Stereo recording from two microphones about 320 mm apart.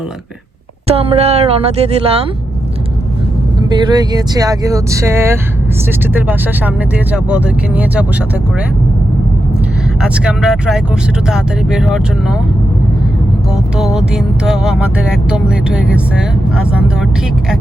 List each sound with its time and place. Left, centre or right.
0.9 s speech: centre
3.7 s speech: centre
6.1 s music: centre
10.0 s music: centre
13.7 s music: centre